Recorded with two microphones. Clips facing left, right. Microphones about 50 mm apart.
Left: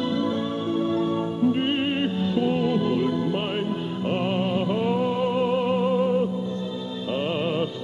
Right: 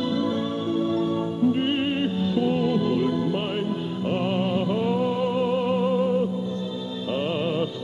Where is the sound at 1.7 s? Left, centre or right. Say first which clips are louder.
Even; centre.